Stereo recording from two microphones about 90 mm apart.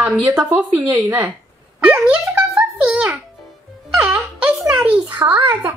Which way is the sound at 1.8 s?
15° right (ahead or behind).